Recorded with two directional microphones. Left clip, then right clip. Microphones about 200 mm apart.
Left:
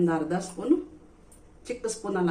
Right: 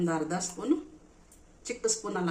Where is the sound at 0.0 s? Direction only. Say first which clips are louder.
Left 4 dB; 25° right (ahead or behind).